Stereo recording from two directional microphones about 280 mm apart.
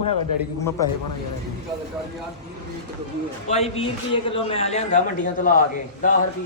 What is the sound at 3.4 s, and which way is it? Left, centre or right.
A man's voice, left.